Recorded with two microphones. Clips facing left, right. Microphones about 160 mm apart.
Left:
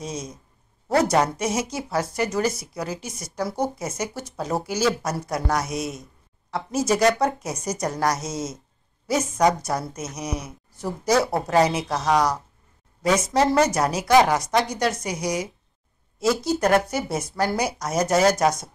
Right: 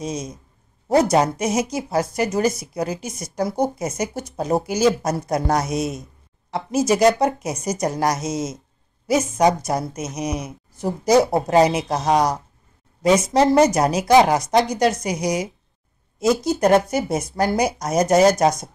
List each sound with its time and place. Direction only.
0.0 s a woman's voice: 15° right (ahead or behind)
1.4 s a woman's voice: 15° right (ahead or behind)
6.5 s a woman's voice: 15° right (ahead or behind)